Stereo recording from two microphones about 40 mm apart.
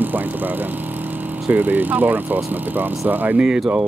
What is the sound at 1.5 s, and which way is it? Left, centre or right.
Speech, right.